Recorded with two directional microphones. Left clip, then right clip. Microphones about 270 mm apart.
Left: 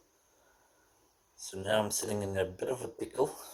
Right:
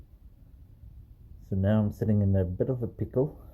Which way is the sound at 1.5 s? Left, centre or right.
Centre.